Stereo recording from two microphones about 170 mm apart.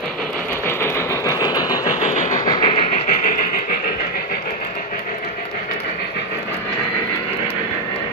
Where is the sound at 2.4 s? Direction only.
25° left (ahead or behind).